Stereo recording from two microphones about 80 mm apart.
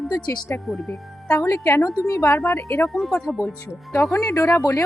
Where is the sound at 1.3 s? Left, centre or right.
Left.